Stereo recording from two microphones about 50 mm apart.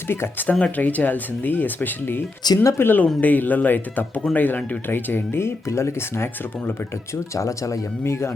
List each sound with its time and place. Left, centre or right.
0.6 s speech: left
3.2 s speech: left
7.3 s speech: left